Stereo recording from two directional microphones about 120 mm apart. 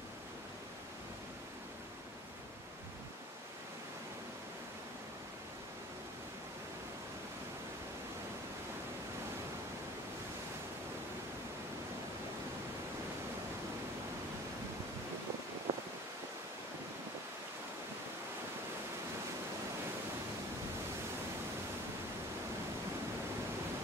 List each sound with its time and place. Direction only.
15.7 s wind: 50° right (ahead or behind)